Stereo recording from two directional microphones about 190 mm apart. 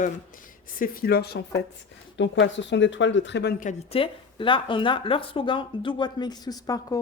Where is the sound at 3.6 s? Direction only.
35° left (ahead or behind).